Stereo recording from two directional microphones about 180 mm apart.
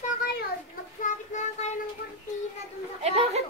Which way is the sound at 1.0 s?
40° left (ahead or behind).